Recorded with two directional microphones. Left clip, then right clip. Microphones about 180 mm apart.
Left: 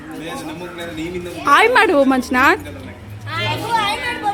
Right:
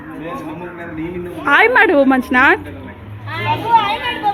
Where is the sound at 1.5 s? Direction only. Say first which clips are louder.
Right 1 dB; 15° left (ahead or behind).